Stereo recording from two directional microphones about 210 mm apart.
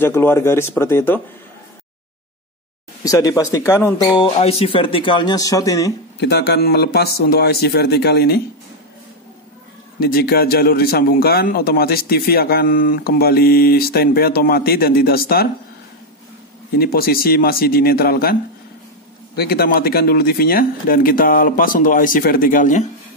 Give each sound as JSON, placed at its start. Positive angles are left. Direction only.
{"t": 0.0, "sound": "speech", "side_deg": 10}
{"t": 3.0, "sound": "speech", "side_deg": 15}
{"t": 6.1, "sound": "speech", "side_deg": 50}
{"t": 9.9, "sound": "speech", "side_deg": 45}
{"t": 16.7, "sound": "speech", "side_deg": 45}